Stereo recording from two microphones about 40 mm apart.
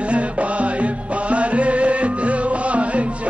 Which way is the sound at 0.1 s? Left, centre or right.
Right.